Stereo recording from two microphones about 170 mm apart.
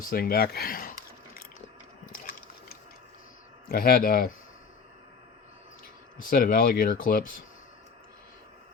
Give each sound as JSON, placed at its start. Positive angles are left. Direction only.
{"t": 0.1, "sound": "a sound", "side_deg": 65}
{"t": 3.7, "sound": "speech", "side_deg": 60}
{"t": 6.1, "sound": "speech", "side_deg": 60}